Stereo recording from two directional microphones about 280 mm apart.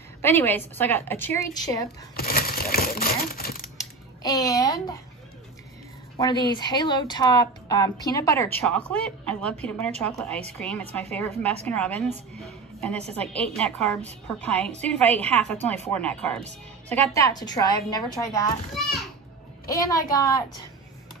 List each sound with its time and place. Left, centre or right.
0.2 s speech: centre
2.1 s crumpling: left
3.7 s a sound: centre
6.1 s a woman's voice: centre
18.8 s children playing: centre
19.7 s speech: centre